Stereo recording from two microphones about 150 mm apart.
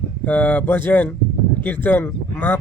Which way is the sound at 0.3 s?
10° left (ahead or behind).